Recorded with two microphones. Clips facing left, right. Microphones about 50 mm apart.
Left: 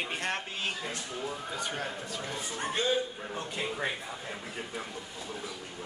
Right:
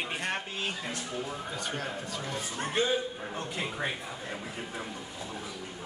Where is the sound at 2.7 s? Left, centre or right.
Centre.